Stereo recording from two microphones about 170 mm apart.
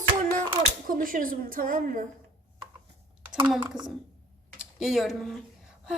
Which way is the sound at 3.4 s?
5° right (ahead or behind).